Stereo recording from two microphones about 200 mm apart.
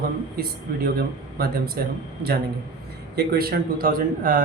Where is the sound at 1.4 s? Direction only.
50° right (ahead or behind).